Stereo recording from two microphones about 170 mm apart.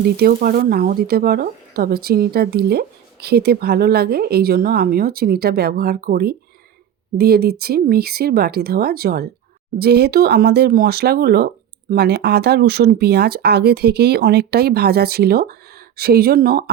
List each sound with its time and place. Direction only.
0.0 s speech: 60° right (ahead or behind)